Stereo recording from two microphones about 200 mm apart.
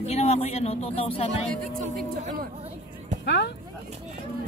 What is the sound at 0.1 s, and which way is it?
Speech, 30° left (ahead or behind).